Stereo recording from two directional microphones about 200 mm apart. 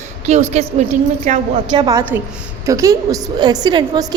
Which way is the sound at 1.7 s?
20° right (ahead or behind).